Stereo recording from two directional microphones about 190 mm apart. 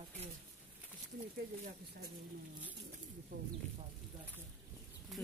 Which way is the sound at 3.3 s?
50° right (ahead or behind).